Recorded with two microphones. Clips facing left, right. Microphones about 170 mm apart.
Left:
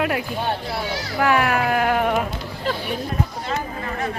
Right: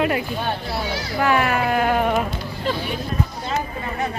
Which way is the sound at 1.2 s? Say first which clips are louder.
Even; 5° left (ahead or behind).